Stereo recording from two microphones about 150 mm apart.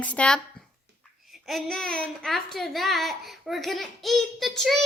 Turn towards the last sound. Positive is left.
turn(degrees=0)  # may be behind; listen again after turning